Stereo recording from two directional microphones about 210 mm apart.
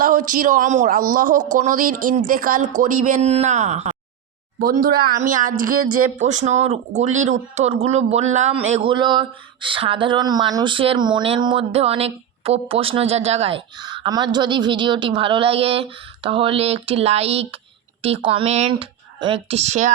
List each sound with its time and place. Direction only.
0.0 s speech: 40° right (ahead or behind)
4.6 s speech: 45° right (ahead or behind)